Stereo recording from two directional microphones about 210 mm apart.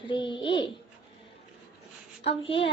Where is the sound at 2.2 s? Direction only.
25° left (ahead or behind).